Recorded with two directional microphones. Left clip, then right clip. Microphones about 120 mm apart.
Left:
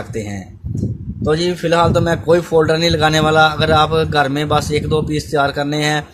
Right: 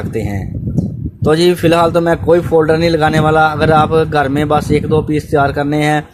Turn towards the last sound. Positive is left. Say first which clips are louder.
# right 4 dB
turn(degrees=-50)  # may be behind; listen again after turning